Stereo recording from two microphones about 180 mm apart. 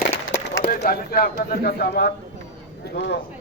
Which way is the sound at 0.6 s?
55° left (ahead or behind).